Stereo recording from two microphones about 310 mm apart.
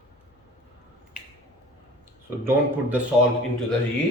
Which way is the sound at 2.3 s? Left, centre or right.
Centre.